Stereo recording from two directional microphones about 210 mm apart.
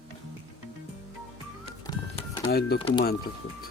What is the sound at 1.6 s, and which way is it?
Music, 25° left (ahead or behind).